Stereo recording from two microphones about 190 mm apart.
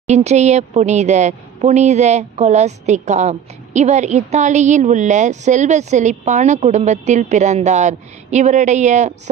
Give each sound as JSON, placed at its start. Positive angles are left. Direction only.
{"t": 0.0, "sound": "a woman's voice", "side_deg": -35}